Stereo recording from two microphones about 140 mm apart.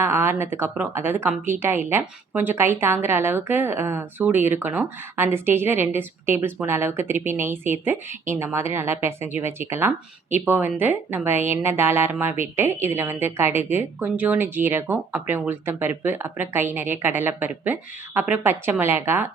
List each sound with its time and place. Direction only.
0.0 s a woman's voice: 20° right (ahead or behind)